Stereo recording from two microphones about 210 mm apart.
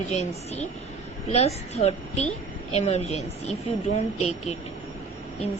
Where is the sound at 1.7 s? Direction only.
30° left (ahead or behind).